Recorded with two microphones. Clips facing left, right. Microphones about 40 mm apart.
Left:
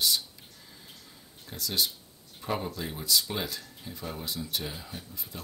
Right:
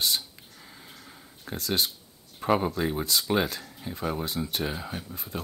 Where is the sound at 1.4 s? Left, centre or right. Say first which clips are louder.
Right 3 dB; right.